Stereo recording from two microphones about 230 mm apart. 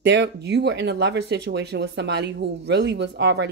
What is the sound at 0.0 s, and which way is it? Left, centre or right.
Speech, right.